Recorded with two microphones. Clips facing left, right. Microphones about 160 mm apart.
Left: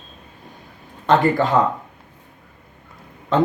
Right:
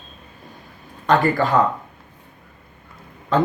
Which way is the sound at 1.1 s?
20° left (ahead or behind).